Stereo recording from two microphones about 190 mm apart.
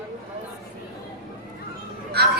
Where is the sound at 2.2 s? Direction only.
55° right (ahead or behind).